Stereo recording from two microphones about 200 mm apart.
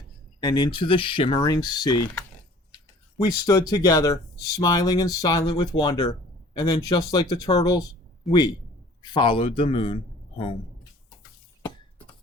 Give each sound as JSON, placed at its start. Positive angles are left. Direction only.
{"t": 0.4, "sound": "speech", "side_deg": 20}
{"t": 3.2, "sound": "a man's voice", "side_deg": 20}